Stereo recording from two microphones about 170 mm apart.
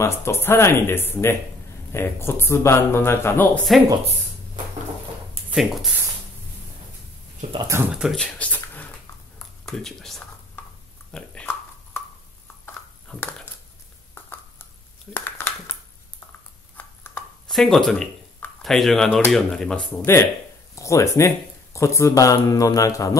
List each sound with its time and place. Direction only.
0.0 s speech: 15° left (ahead or behind)
5.5 s speech: centre (ahead or behind)
7.5 s speech: 20° right (ahead or behind)
7.9 s speech: 5° right (ahead or behind)
8.4 s a sound: 10° left (ahead or behind)
9.7 s speech: centre (ahead or behind)
11.1 s a sound: 5° left (ahead or behind)
16.7 s a sound: 5° left (ahead or behind)
19.3 s speech: 5° left (ahead or behind); by 23.1 s 20° left (ahead or behind)